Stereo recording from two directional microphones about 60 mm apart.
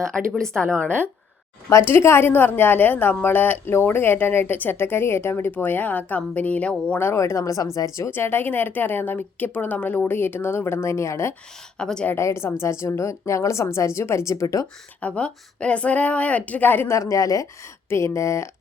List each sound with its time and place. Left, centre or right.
0.0 s a woman's voice: centre
1.8 s a woman's voice: left
7.2 s speech: left
8.1 s a woman's voice: left
11.8 s a woman's voice: centre
12.1 s a woman's voice: left
15.0 s a woman's voice: centre
16.9 s speech: left
17.8 s speech: left